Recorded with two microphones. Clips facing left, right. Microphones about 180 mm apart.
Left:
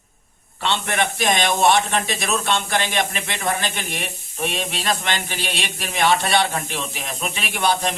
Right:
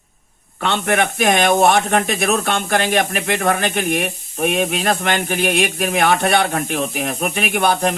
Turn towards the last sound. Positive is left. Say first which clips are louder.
# right 4 dB
turn(degrees=-55)  # may be behind; listen again after turning